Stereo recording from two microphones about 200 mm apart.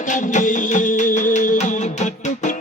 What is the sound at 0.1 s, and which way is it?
Music, 40° left (ahead or behind).